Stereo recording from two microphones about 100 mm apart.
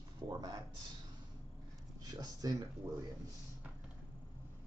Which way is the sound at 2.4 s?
35° right (ahead or behind).